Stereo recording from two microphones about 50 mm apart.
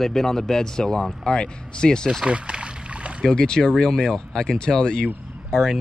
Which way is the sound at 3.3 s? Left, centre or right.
Centre.